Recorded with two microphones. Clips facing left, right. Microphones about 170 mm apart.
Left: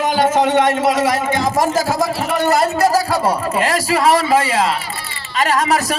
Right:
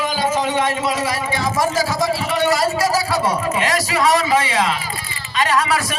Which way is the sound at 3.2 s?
35° left (ahead or behind).